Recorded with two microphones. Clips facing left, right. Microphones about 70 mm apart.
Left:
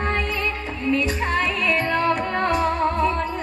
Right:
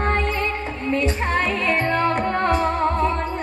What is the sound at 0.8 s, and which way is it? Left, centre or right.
Music, right.